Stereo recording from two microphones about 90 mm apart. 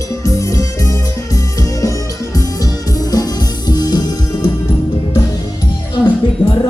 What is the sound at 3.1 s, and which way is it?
Music, 50° left (ahead or behind).